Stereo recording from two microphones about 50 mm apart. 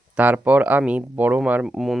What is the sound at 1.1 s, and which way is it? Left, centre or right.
Speech, right.